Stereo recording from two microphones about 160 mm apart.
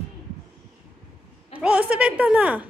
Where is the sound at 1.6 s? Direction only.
5° right (ahead or behind).